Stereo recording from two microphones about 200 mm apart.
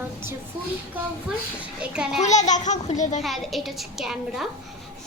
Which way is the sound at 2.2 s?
35° left (ahead or behind).